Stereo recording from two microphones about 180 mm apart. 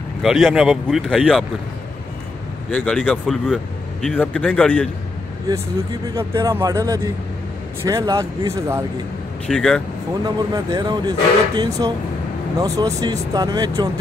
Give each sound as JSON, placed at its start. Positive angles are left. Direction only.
{"t": 0.2, "sound": "speech", "side_deg": 0}
{"t": 2.7, "sound": "speech", "side_deg": 5}
{"t": 6.1, "sound": "a man's voice", "side_deg": -15}
{"t": 9.5, "sound": "speech", "side_deg": 5}
{"t": 10.2, "sound": "speech", "side_deg": -20}